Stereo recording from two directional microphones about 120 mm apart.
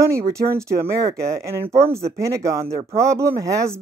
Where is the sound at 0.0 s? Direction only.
25° right (ahead or behind).